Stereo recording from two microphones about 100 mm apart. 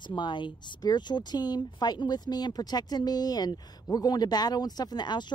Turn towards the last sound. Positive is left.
turn(degrees=45)  # may be behind; listen again after turning